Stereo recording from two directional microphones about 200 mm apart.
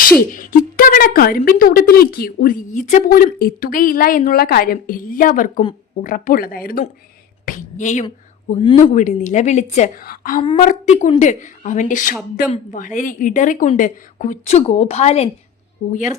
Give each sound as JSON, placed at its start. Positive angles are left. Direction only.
{"t": 0.2, "sound": "a woman's voice", "side_deg": 45}
{"t": 8.5, "sound": "a woman's voice", "side_deg": 25}
{"t": 8.8, "sound": "a woman's voice", "side_deg": 40}
{"t": 10.4, "sound": "a woman's voice", "side_deg": 25}
{"t": 11.2, "sound": "a woman's voice", "side_deg": 40}